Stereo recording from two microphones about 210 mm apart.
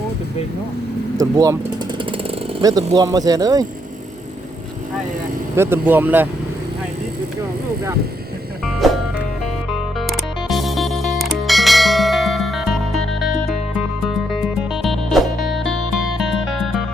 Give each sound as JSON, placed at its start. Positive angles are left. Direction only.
{"t": 1.1, "sound": "speech", "side_deg": -15}
{"t": 5.5, "sound": "speech", "side_deg": -10}
{"t": 8.6, "sound": "music", "side_deg": 0}